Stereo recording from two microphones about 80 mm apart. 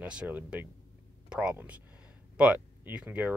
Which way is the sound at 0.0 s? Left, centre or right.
Centre.